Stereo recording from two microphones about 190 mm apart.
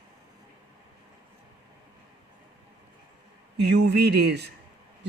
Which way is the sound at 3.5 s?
60° right (ahead or behind).